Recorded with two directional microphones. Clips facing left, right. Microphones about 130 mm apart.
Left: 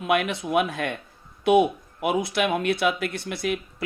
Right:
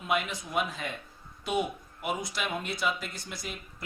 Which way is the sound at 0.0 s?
70° left (ahead or behind).